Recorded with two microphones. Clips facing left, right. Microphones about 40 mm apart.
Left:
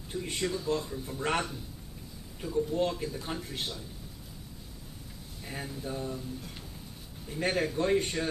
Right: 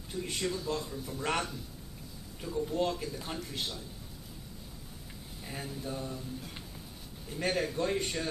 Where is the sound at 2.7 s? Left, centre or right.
Centre.